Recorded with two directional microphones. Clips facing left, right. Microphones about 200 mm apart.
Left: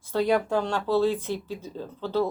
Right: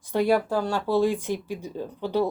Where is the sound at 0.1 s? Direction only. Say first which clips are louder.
Right 1 dB; 10° right (ahead or behind).